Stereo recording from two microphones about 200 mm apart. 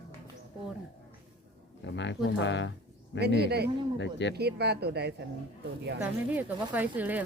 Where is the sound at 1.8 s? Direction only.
60° left (ahead or behind).